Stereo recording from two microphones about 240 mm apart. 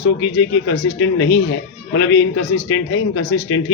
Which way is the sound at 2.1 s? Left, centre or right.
Left.